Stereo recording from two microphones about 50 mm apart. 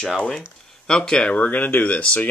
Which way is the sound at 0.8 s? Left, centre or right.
Centre.